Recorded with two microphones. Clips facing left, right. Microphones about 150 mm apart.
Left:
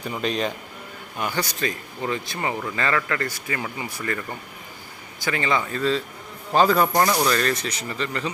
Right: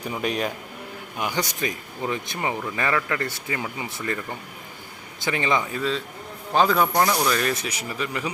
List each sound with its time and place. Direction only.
0.0 s speech: 10° right (ahead or behind)
2.5 s speech: 5° right (ahead or behind)
6.5 s speech: centre (ahead or behind)